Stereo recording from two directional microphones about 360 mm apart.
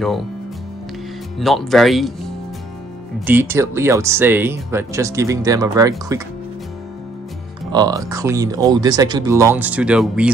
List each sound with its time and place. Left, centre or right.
1.4 s speech: centre
7.7 s speech: centre